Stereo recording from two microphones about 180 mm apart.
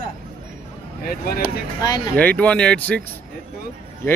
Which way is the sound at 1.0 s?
55° left (ahead or behind).